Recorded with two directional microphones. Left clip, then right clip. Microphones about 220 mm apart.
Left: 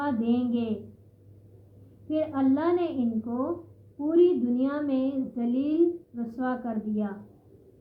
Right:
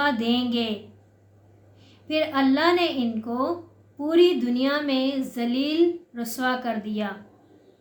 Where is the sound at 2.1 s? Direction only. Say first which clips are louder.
Right 4 dB; 15° right (ahead or behind).